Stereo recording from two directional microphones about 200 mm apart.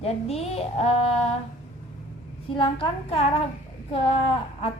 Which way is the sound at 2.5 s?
25° left (ahead or behind).